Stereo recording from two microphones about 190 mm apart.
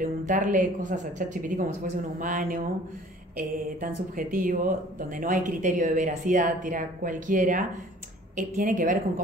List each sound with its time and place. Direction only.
0.0 s speech: 45° right (ahead or behind)